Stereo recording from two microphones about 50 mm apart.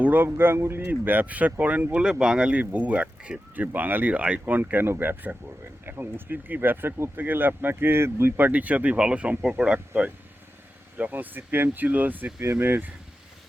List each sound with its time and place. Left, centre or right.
0.0 s speech: right
2.0 s speech: centre
2.6 s speech: right
3.5 s speech: right
4.6 s speech: right
8.4 s speech: right
9.4 s speech: centre
9.7 s speech: right